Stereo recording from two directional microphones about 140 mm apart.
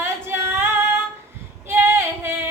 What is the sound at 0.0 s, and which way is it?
Female singing, 15° right (ahead or behind).